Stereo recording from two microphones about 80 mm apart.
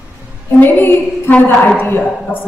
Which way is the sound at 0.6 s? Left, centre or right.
Left.